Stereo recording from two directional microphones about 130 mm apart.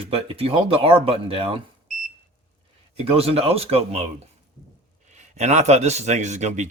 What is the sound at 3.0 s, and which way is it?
Speech, 50° right (ahead or behind).